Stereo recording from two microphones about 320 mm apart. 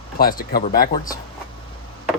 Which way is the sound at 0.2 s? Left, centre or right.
Left.